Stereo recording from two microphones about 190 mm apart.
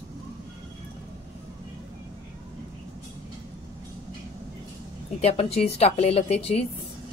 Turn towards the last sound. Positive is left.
turn(degrees=35)  # may be behind; listen again after turning